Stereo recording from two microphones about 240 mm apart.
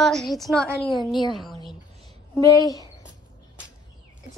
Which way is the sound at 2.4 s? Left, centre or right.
Centre.